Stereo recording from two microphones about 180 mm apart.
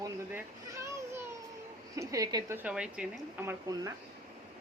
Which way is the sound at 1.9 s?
20° right (ahead or behind).